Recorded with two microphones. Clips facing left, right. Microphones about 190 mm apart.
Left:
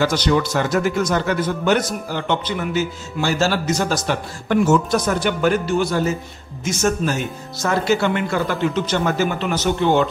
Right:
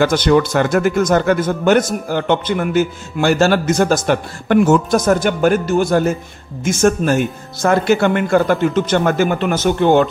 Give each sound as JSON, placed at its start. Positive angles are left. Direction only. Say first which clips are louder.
{"t": 0.0, "sound": "speech", "louder": "right 5 dB", "side_deg": -55}